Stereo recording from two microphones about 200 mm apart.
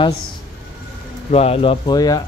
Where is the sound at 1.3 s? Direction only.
30° left (ahead or behind).